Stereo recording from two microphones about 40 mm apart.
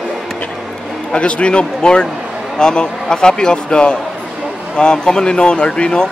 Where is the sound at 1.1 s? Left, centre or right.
Left.